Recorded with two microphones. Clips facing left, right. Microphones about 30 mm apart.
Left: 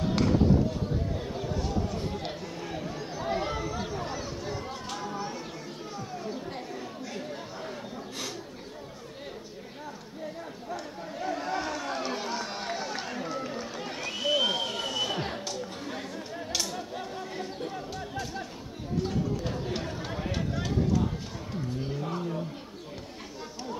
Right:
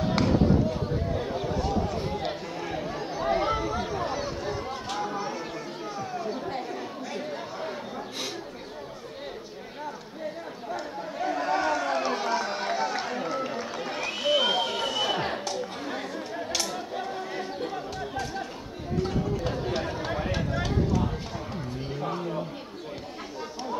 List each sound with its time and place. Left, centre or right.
0.0 s a sound: centre
2.2 s chatter: centre
6.3 s chatter: right
10.7 s chatter: centre
11.7 s run: centre
14.1 s a sound: right
19.0 s chatter: centre
20.3 s clip-clop: right
21.5 s a sound: centre